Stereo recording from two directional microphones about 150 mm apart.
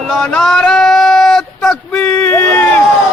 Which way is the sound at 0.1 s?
5° left (ahead or behind).